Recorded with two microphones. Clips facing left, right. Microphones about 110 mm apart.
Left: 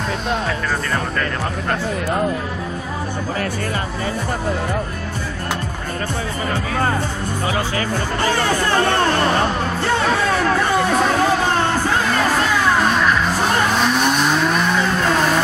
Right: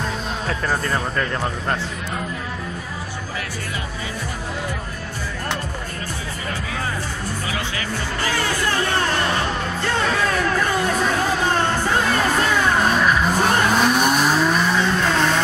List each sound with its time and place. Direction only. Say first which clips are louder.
8.3 s music: left 4 dB; 45° left (ahead or behind)
13.7 s vehicle: even; 10° right (ahead or behind)